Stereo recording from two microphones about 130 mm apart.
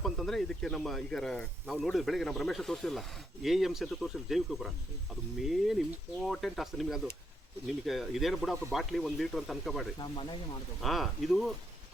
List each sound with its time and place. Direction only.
0.0 s speech: centre (ahead or behind)
10.0 s speech: 40° left (ahead or behind)
10.8 s speech: centre (ahead or behind)